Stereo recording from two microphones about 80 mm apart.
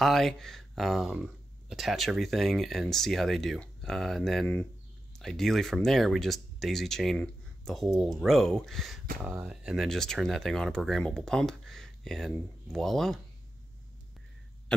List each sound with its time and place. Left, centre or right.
0.0 s speech: centre
9.4 s speech: centre
9.8 s speech: centre